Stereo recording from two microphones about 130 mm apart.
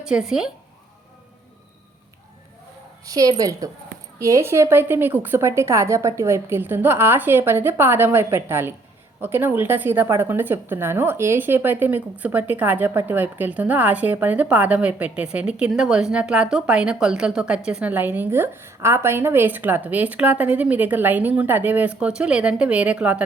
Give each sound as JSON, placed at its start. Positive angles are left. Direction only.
{"t": 0.0, "sound": "speech", "side_deg": -5}
{"t": 3.1, "sound": "a woman's voice", "side_deg": -25}